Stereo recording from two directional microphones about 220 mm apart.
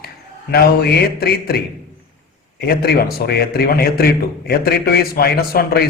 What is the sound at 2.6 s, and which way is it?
A man's voice, 45° left (ahead or behind).